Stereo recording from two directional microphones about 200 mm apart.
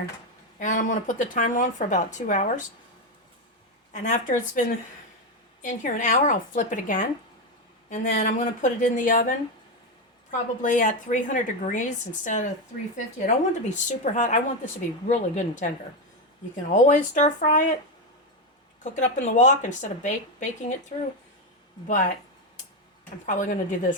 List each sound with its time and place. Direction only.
0.6 s speech: 40° left (ahead or behind)
4.0 s speech: 40° left (ahead or behind)
5.6 s speech: 40° left (ahead or behind)
10.6 s speech: 40° left (ahead or behind)
18.8 s speech: 35° left (ahead or behind)
21.8 s speech: 40° left (ahead or behind)
23.2 s speech: 40° left (ahead or behind)